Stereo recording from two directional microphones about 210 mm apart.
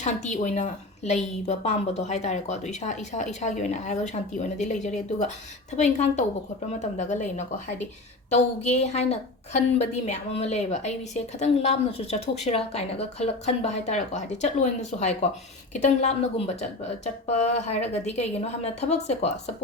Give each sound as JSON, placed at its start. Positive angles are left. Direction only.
{"t": 0.0, "sound": "a woman's voice", "side_deg": 35}
{"t": 17.2, "sound": "a woman's voice", "side_deg": 30}